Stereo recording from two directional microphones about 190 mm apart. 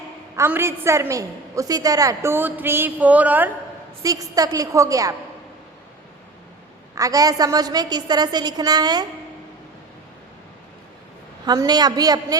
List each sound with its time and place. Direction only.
0.3 s a woman's voice: 10° right (ahead or behind)
6.9 s a woman's voice: 20° right (ahead or behind)
11.4 s a woman's voice: 20° right (ahead or behind)